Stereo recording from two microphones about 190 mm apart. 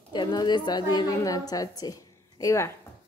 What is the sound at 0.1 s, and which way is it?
A woman's voice, 25° left (ahead or behind).